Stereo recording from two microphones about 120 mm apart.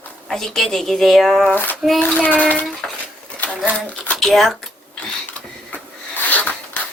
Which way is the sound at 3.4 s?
10° left (ahead or behind).